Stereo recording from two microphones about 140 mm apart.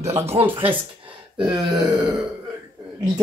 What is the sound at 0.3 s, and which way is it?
Speech, 45° right (ahead or behind).